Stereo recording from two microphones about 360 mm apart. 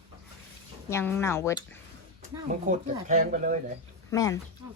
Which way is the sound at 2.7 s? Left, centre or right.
Right.